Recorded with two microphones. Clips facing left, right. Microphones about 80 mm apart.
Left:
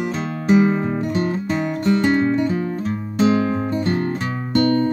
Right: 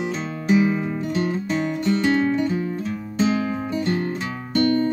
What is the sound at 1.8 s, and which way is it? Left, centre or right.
Music, left.